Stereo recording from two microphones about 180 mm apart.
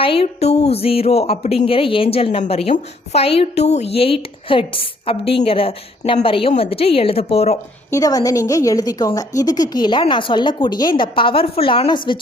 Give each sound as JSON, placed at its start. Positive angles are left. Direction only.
{"t": 0.0, "sound": "speech", "side_deg": 30}
{"t": 7.9, "sound": "a woman's voice", "side_deg": 20}